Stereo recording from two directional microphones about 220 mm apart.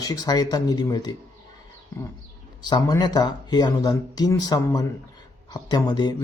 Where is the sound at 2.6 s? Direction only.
20° left (ahead or behind).